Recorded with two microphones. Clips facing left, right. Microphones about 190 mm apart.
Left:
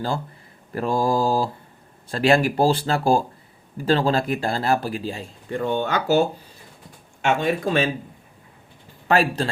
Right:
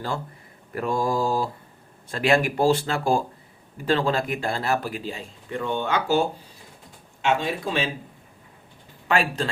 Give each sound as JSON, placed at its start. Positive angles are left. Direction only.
{"t": 0.7, "sound": "speech", "side_deg": 30}
{"t": 9.0, "sound": "speech", "side_deg": 35}